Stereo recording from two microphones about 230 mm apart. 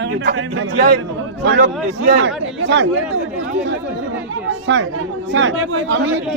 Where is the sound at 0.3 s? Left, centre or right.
Right.